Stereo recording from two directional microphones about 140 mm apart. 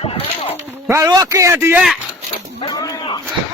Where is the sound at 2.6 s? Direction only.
30° left (ahead or behind).